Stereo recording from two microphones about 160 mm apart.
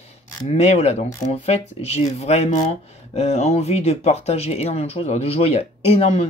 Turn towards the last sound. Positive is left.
turn(degrees=40)  # may be behind; listen again after turning